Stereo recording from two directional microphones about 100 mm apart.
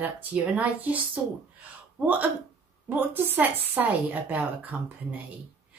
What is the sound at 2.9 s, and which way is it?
Speech, 20° right (ahead or behind).